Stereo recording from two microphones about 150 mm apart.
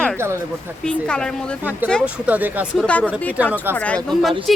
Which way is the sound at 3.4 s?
10° right (ahead or behind).